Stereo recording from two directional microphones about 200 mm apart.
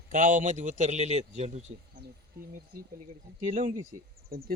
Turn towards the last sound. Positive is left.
turn(degrees=-45)  # may be behind; listen again after turning